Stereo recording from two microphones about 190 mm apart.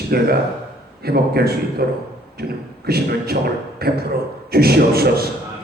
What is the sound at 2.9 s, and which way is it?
Speech, 55° right (ahead or behind).